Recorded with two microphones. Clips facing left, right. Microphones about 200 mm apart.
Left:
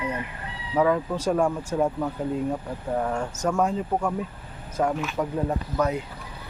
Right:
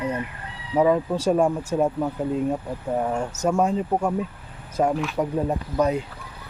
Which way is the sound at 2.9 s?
20° right (ahead or behind).